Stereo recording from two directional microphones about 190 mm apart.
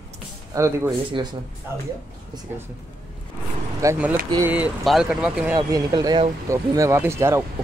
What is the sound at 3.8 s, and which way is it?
Speech, 10° right (ahead or behind).